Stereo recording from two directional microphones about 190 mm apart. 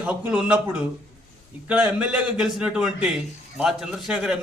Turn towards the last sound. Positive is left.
turn(degrees=-5)  # may be behind; listen again after turning